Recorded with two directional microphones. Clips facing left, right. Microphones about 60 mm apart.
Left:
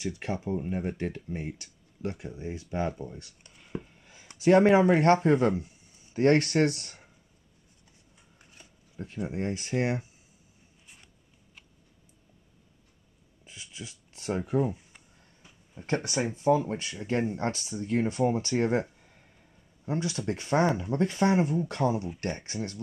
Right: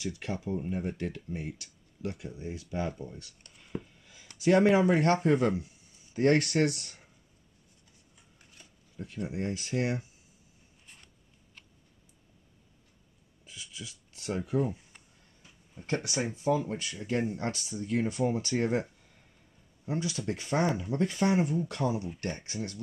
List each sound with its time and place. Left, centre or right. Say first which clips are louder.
0.0 s speech: left 3 dB; left
2.9 s speech: left 3 dB; centre
4.0 s speech: left 3 dB; left
9.0 s speech: left 2 dB; left
13.5 s a sound: left 1 dB; left
15.8 s speech: left 3 dB; left